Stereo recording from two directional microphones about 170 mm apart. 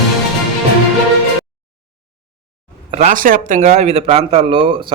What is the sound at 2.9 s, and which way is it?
A man's voice, 50° right (ahead or behind).